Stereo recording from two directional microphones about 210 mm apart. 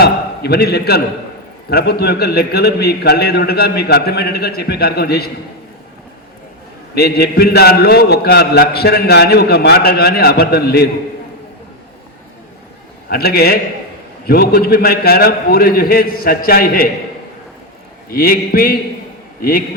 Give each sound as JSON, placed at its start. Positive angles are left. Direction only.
{"t": 0.0, "sound": "a man's voice", "side_deg": 50}
{"t": 6.9, "sound": "a man's voice", "side_deg": 50}
{"t": 13.1, "sound": "a man's voice", "side_deg": 50}
{"t": 18.1, "sound": "a man's voice", "side_deg": 45}